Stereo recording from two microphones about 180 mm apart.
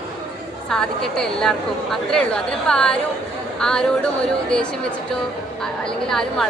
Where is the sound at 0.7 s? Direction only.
5° left (ahead or behind).